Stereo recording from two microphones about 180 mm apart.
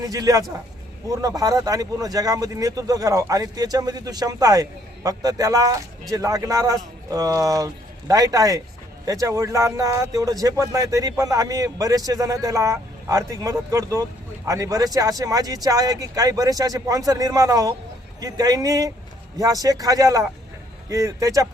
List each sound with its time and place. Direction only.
0.0 s speech: 20° right (ahead or behind)